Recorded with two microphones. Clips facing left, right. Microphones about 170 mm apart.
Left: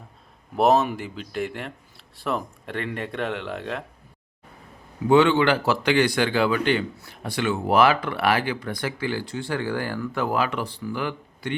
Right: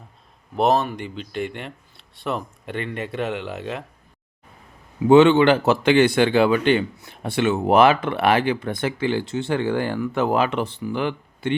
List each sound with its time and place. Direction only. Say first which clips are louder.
0.5 s speech: even; centre (ahead or behind)
5.0 s speech: right 5 dB; 20° right (ahead or behind)